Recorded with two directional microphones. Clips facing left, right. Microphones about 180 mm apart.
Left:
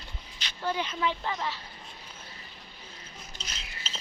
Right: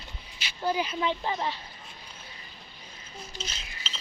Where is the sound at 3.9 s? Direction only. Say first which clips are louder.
Left 1 dB; 45° left (ahead or behind).